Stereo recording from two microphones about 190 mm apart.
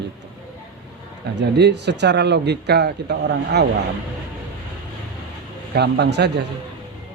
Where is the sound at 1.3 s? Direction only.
65° right (ahead or behind).